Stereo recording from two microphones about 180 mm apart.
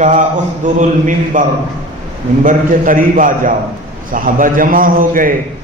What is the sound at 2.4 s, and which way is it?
A man's voice, 50° right (ahead or behind).